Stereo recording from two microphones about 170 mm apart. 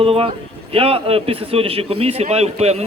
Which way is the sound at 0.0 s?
35° right (ahead or behind).